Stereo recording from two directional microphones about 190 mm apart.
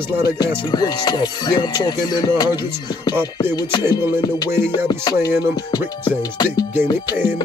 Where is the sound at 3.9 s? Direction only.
20° left (ahead or behind).